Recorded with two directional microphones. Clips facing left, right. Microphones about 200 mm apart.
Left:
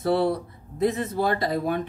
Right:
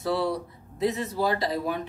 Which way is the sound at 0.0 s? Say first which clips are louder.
Left 4 dB; 55° left (ahead or behind).